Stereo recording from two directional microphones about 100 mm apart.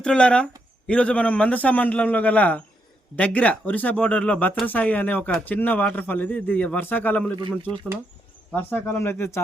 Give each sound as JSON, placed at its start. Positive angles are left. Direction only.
{"t": 0.0, "sound": "speech", "side_deg": 10}
{"t": 8.5, "sound": "speech", "side_deg": 20}